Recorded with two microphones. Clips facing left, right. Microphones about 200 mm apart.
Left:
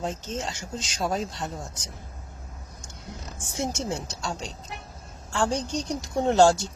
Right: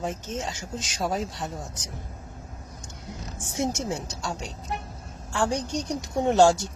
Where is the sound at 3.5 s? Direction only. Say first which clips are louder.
Right 2 dB; 20° right (ahead or behind).